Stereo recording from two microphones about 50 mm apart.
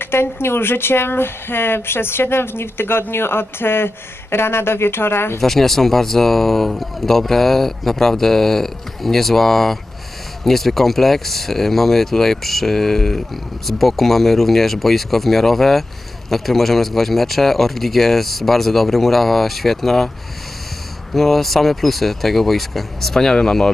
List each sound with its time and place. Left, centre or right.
0.0 s speech: left
5.4 s speech: centre
21.1 s speech: centre